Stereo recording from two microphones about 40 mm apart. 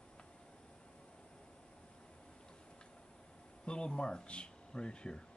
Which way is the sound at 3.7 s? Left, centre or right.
Left.